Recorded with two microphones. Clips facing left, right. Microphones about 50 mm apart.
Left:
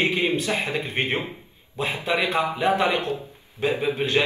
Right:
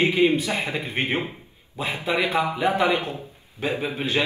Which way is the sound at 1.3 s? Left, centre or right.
Centre.